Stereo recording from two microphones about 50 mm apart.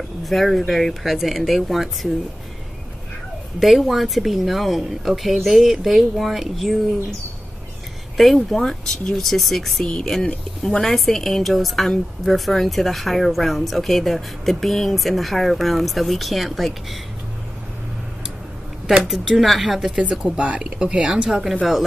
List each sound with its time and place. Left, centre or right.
0.2 s speech: centre
3.5 s speech: centre
8.2 s speech: centre
18.9 s speech: centre
20.0 s speech: right
21.3 s speech: centre